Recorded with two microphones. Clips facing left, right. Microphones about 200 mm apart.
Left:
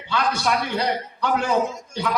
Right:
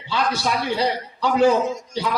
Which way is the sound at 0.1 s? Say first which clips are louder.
Even; 55° left (ahead or behind).